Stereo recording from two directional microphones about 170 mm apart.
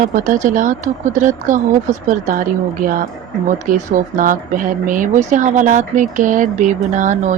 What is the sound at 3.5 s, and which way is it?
Speech, 50° right (ahead or behind).